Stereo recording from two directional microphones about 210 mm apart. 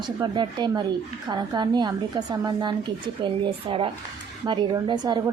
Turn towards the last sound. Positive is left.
turn(degrees=-20)  # may be behind; listen again after turning